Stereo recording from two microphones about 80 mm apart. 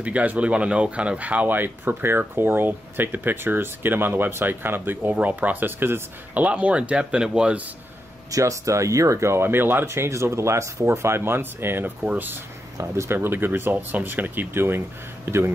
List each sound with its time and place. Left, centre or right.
0.0 s speech: centre
8.3 s speech: right; by 12.4 s centre
12.7 s speech: right